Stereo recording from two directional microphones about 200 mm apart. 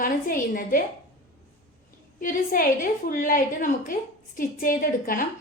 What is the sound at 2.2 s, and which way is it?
A woman's voice, 45° left (ahead or behind).